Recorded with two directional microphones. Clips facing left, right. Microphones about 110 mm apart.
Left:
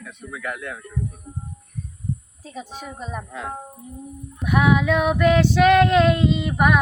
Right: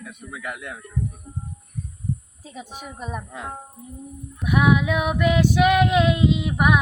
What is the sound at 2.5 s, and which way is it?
Female singing, 15° right (ahead or behind).